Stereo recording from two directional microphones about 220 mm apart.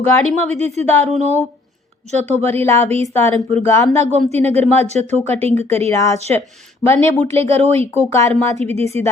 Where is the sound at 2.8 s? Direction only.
30° right (ahead or behind).